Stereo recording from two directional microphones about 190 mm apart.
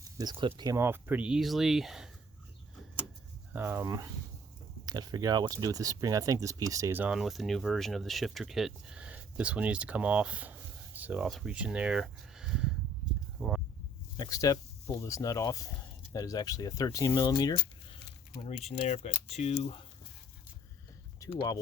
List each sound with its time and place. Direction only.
0.2 s speech: 25° right (ahead or behind); by 2.0 s centre (ahead or behind)
3.5 s speech: 10° right (ahead or behind)
13.4 s a sound: centre (ahead or behind)
14.2 s speech: 20° left (ahead or behind)
18.6 s speech: 35° left (ahead or behind)